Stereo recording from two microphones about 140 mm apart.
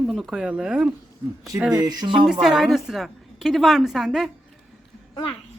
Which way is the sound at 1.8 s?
30° right (ahead or behind).